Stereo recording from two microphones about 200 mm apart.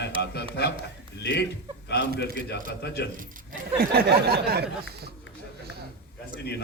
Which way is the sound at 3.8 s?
55° right (ahead or behind).